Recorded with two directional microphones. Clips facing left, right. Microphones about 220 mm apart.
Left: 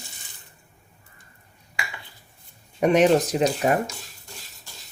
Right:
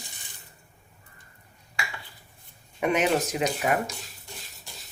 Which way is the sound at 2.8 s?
35° left (ahead or behind).